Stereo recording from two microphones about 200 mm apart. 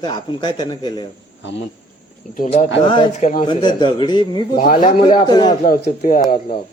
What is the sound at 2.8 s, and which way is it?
Speech, 20° left (ahead or behind).